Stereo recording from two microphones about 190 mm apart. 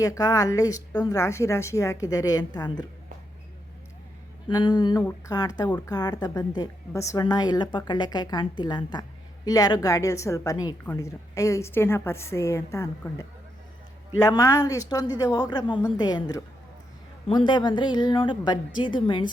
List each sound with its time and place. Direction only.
0.0 s a woman's voice: 20° left (ahead or behind)
4.4 s a woman's voice: 20° left (ahead or behind)